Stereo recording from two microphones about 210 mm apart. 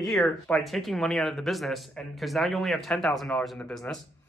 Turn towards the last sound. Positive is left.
turn(degrees=0)  # may be behind; listen again after turning